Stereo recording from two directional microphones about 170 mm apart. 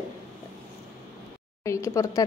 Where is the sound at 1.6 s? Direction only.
15° left (ahead or behind).